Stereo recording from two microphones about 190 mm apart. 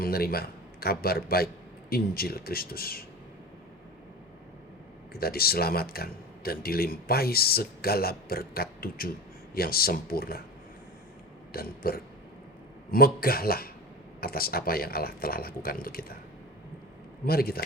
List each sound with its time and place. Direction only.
0.0 s speech: 50° left (ahead or behind)
5.1 s speech: 55° left (ahead or behind)
11.5 s speech: 50° left (ahead or behind)
17.2 s speech: 55° left (ahead or behind)